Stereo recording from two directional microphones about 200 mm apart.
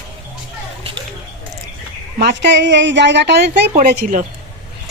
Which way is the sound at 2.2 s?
60° right (ahead or behind).